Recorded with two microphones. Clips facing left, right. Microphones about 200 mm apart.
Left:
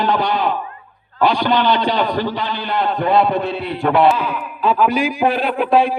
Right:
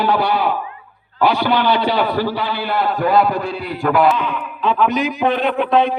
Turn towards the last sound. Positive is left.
turn(degrees=10)  # may be behind; listen again after turning